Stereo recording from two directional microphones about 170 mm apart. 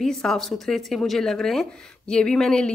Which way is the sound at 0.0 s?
5° left (ahead or behind).